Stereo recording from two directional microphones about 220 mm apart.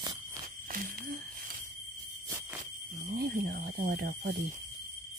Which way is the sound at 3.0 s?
40° right (ahead or behind).